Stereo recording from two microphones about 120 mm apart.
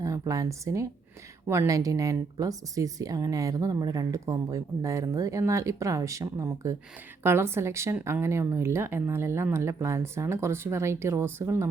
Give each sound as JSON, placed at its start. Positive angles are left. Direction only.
{"t": 0.0, "sound": "speech", "side_deg": -25}